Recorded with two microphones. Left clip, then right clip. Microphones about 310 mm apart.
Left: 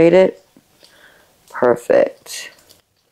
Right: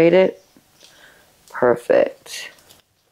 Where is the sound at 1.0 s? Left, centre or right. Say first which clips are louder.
Left 1 dB; right.